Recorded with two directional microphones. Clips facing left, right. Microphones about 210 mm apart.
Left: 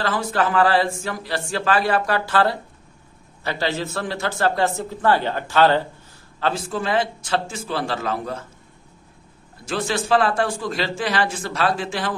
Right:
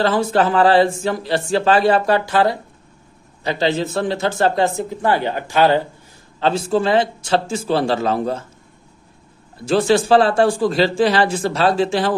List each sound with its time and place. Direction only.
0.0 s speech: 25° right (ahead or behind)
6.4 s speech: 30° right (ahead or behind)
9.7 s speech: 30° right (ahead or behind)